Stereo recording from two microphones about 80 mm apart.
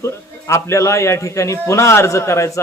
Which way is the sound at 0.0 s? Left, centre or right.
Left.